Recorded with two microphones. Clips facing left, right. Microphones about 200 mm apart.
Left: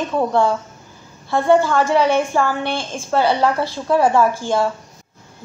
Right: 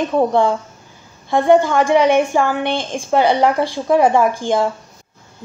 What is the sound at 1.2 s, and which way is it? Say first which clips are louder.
A woman's voice: right 2 dB; 20° right (ahead or behind).